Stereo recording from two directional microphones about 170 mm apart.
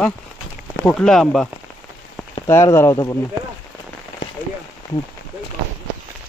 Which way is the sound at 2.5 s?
15° left (ahead or behind).